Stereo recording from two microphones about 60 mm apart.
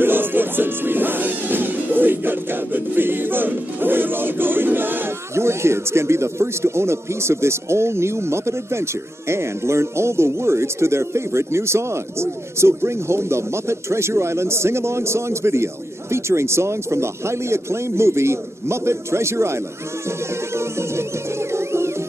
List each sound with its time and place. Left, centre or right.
0.0 s music: right
5.3 s speech: right
20.5 s music: right